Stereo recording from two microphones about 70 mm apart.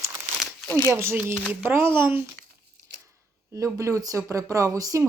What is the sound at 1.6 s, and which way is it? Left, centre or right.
Speech, right.